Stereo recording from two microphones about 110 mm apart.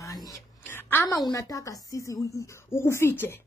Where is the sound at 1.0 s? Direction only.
30° left (ahead or behind).